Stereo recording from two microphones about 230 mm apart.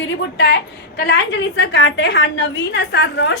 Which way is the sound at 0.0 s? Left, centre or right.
Left.